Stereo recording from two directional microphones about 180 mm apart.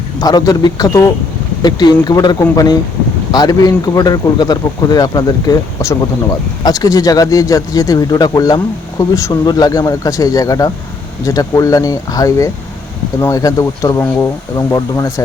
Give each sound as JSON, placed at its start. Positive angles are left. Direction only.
{"t": 0.2, "sound": "speech", "side_deg": 20}